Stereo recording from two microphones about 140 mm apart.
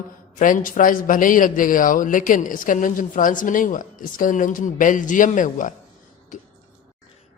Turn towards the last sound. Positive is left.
turn(degrees=65)  # may be behind; listen again after turning